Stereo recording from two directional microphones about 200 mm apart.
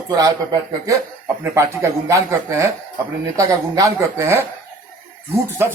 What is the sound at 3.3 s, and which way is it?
Speech, 15° right (ahead or behind).